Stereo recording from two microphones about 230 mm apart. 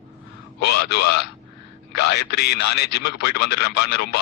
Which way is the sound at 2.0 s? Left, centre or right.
Left.